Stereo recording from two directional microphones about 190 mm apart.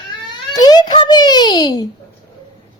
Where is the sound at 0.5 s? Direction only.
20° left (ahead or behind).